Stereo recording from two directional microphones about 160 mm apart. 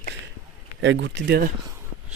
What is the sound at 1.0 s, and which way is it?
Speech, 90° right.